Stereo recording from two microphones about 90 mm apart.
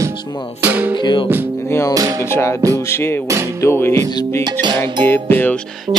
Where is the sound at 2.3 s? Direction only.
30° left (ahead or behind).